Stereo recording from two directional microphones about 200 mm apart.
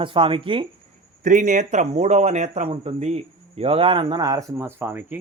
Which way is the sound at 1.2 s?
40° right (ahead or behind).